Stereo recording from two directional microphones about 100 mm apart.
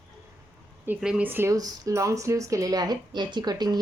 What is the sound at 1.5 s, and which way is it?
Speech, 35° right (ahead or behind).